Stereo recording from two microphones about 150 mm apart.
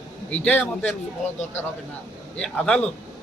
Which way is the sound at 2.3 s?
5° left (ahead or behind).